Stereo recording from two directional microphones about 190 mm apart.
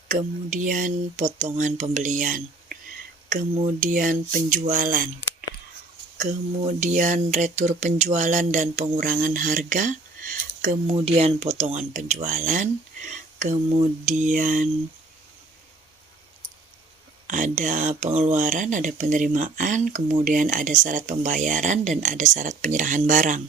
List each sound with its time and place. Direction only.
0.1 s speech: 45° right (ahead or behind)
10.9 s speech: 30° right (ahead or behind)
17.2 s speech: 40° right (ahead or behind)